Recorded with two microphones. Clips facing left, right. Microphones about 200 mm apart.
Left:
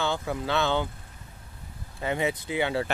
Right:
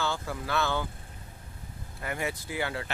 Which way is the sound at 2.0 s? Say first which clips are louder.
Left 6 dB; 20° left (ahead or behind).